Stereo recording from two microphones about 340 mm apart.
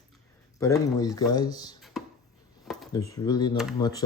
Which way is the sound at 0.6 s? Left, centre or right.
Centre.